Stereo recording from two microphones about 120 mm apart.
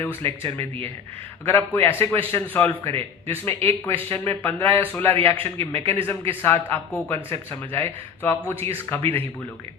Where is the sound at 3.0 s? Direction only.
55° right (ahead or behind).